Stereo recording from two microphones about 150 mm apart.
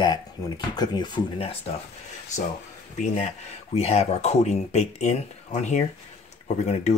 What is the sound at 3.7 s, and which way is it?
Speech, 45° left (ahead or behind).